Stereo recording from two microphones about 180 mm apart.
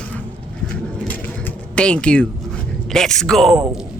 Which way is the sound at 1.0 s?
10° left (ahead or behind).